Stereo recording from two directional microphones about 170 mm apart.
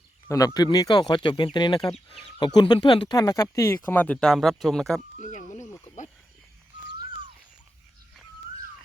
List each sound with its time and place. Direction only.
0.3 s speech: 20° left (ahead or behind); by 5.0 s 5° left (ahead or behind)